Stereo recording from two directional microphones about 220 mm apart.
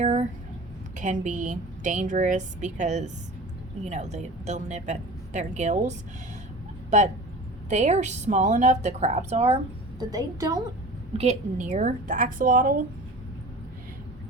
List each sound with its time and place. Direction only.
0.0 s a woman's voice: 30° right (ahead or behind)
7.7 s a woman's voice: 30° right (ahead or behind)
10.0 s a woman's voice: 15° right (ahead or behind)
11.1 s a woman's voice: 30° right (ahead or behind)